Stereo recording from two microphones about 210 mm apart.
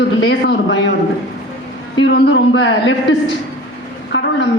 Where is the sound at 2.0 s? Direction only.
60° left (ahead or behind).